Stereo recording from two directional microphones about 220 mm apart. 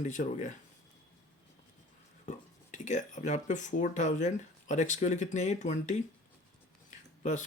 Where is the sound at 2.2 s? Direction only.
35° left (ahead or behind).